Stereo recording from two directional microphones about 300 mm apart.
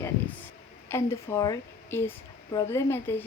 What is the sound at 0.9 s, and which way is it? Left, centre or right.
A woman's voice, centre.